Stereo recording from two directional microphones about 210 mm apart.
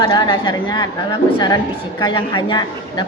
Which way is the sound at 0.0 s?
20° left (ahead or behind).